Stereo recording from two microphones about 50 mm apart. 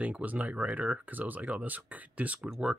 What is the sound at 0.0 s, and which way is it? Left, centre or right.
Speech, right.